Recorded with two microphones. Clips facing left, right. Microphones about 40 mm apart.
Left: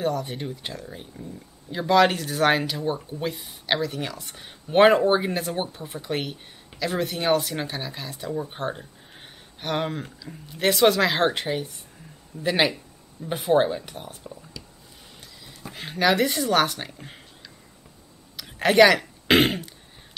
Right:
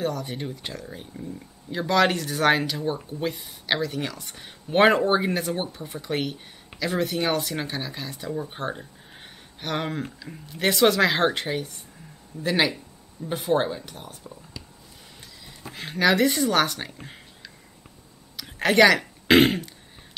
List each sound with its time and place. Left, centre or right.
0.0 s speech: centre
10.3 s speech: right
10.6 s speech: centre
15.7 s speech: centre